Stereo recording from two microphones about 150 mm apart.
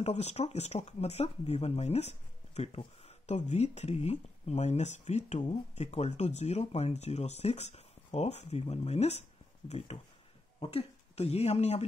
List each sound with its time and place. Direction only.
0.0 s speech: 45° left (ahead or behind)